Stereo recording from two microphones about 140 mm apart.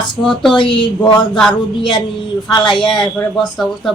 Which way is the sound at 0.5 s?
35° left (ahead or behind).